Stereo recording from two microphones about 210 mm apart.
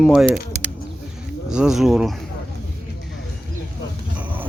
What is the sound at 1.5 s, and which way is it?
Speech, 5° right (ahead or behind).